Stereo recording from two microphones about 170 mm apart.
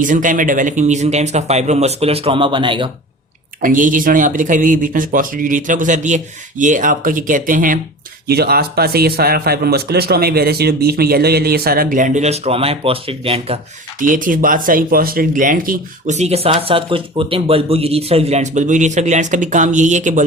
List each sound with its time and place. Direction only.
0.0 s speech: 50° right (ahead or behind); by 2.9 s 30° right (ahead or behind)
3.6 s speech: 50° right (ahead or behind)
8.3 s a man's voice: 65° right (ahead or behind); by 13.6 s 35° right (ahead or behind)
14.0 s speech: 50° right (ahead or behind)